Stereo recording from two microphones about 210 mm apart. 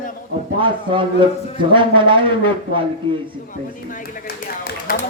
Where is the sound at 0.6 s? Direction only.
25° right (ahead or behind).